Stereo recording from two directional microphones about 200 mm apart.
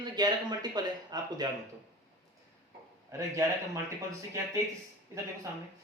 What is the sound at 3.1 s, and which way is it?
Speech, 15° right (ahead or behind).